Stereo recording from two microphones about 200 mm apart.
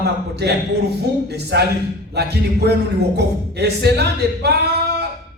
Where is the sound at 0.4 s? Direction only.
55° right (ahead or behind).